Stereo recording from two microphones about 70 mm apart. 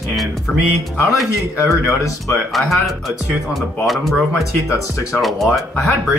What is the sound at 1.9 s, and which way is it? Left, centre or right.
Speech, left.